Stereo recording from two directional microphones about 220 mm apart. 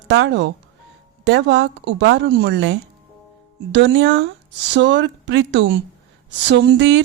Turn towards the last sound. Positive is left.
turn(degrees=-55)  # may be behind; listen again after turning